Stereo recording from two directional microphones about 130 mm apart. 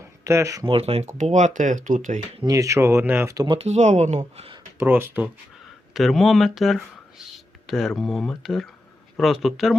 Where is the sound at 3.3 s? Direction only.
30° right (ahead or behind).